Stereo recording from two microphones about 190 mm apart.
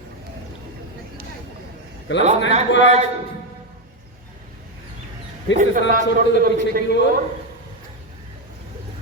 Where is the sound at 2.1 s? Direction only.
80° left.